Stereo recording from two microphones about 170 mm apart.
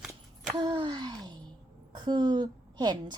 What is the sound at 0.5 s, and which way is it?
A woman's voice, 25° right (ahead or behind).